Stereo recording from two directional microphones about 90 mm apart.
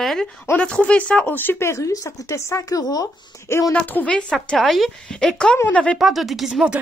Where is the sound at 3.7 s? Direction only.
15° left (ahead or behind).